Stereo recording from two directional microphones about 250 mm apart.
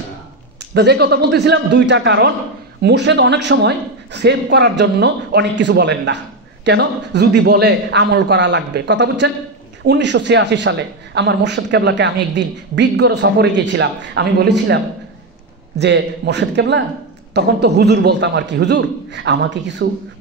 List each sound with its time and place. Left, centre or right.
0.7 s a man's voice: right
15.8 s a woman's voice: right